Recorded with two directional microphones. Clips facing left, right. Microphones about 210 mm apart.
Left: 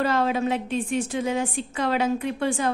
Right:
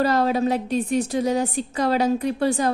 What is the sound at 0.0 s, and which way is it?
A woman's voice, 40° right (ahead or behind).